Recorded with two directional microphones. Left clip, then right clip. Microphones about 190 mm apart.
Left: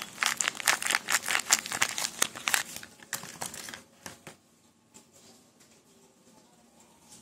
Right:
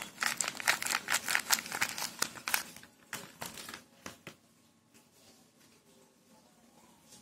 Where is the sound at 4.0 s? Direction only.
35° left (ahead or behind).